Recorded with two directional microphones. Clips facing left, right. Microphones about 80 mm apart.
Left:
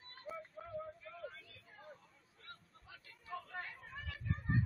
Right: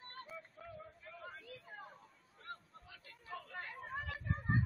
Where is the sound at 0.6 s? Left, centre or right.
Left.